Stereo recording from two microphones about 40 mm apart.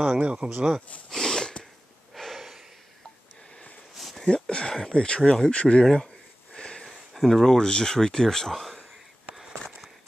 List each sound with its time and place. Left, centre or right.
0.1 s speech: right
1.1 s sniff: centre
2.1 s breathing: centre
3.9 s a sound: centre
4.3 s speech: left
6.5 s sniff: centre
7.2 s speech: centre
7.5 s speech: centre